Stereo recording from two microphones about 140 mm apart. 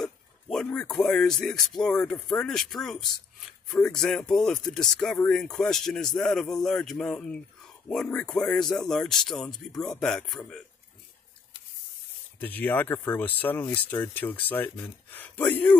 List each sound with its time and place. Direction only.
0.0 s a sound: 5° left (ahead or behind)
0.9 s speech: centre (ahead or behind)
12.4 s speech: 10° left (ahead or behind)